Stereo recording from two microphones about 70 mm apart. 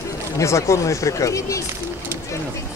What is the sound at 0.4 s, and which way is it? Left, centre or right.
Speech, left.